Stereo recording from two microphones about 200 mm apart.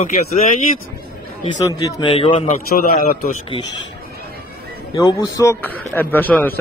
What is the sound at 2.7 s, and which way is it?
Speech, 45° left (ahead or behind).